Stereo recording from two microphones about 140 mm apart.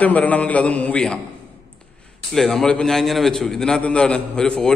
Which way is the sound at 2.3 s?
5° left (ahead or behind).